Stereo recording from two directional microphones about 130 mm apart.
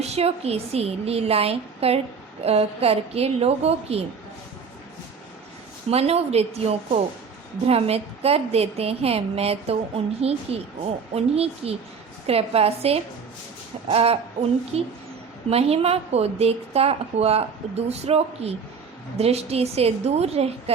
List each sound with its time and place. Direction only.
0.0 s a woman's voice: 55° right (ahead or behind)
5.9 s a woman's voice: 50° right (ahead or behind)